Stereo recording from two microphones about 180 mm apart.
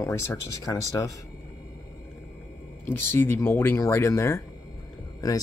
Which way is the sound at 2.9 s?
10° left (ahead or behind).